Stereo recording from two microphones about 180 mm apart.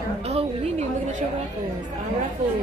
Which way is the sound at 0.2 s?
35° right (ahead or behind).